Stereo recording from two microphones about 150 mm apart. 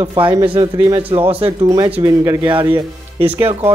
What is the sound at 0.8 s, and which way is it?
Speech, 35° right (ahead or behind).